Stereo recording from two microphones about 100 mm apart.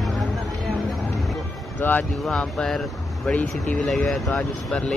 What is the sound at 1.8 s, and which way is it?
Speech, 15° left (ahead or behind).